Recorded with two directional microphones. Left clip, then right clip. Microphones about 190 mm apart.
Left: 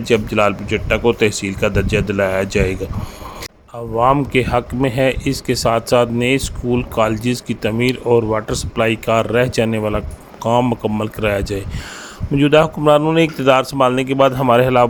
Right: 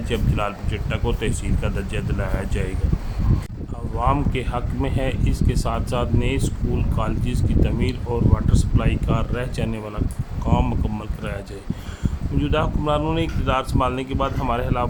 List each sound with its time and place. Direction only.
0.0 s speech: 25° left (ahead or behind)
3.9 s speech: 30° left (ahead or behind)